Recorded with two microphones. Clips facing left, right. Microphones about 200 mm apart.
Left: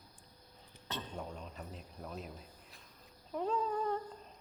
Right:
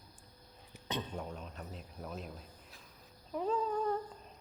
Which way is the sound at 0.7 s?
15° right (ahead or behind).